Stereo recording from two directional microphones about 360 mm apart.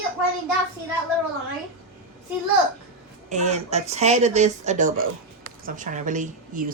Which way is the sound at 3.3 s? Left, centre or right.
Centre.